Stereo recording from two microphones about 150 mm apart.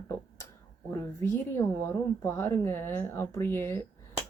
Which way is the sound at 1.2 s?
15° left (ahead or behind).